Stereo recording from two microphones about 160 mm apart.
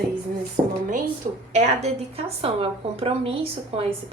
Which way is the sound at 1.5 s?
45° right (ahead or behind).